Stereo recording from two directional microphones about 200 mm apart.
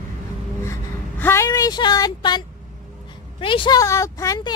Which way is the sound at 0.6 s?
10° left (ahead or behind).